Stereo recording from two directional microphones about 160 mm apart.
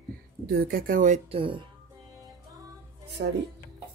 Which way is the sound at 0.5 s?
65° right (ahead or behind).